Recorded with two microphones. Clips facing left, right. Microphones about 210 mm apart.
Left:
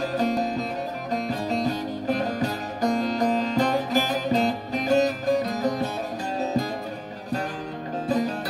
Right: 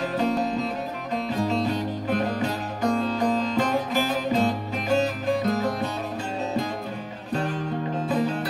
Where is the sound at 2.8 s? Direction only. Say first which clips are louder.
Left 1 dB; 35° left (ahead or behind).